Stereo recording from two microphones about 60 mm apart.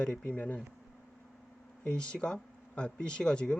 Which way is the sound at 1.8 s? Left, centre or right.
Centre.